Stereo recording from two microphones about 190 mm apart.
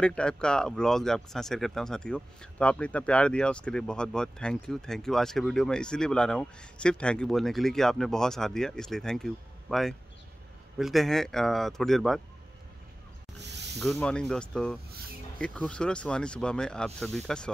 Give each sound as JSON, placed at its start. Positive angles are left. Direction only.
{"t": 0.0, "sound": "speech", "side_deg": 5}
{"t": 13.4, "sound": "snake", "side_deg": -65}
{"t": 13.9, "sound": "speech", "side_deg": 5}